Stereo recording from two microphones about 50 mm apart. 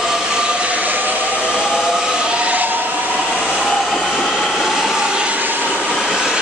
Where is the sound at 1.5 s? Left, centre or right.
Centre; by 2.8 s right.